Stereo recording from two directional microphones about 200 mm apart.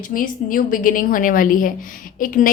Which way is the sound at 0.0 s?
45° left (ahead or behind).